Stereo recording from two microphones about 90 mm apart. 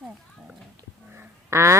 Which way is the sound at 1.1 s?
30° right (ahead or behind).